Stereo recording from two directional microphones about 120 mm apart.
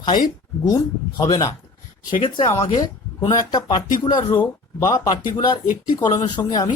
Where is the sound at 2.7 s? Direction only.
30° left (ahead or behind).